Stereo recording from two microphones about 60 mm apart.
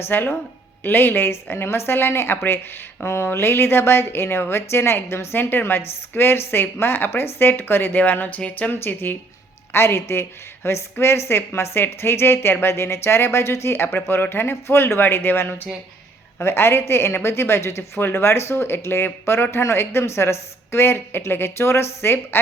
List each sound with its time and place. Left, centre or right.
0.0 s a woman's voice: left